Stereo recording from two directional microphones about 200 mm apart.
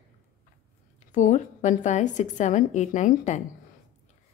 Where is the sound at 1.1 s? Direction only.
40° left (ahead or behind).